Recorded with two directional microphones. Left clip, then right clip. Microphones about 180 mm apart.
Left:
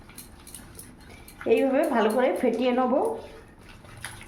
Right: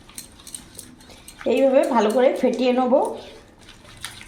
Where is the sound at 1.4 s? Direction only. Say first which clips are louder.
Right 5 dB; 25° right (ahead or behind).